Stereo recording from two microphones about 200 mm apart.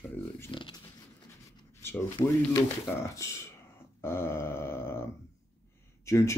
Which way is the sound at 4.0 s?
10° left (ahead or behind).